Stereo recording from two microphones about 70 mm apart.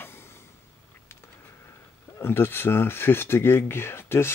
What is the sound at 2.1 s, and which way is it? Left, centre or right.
Speech, left.